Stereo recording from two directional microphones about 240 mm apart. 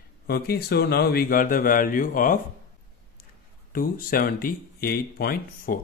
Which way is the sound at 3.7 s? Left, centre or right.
Left.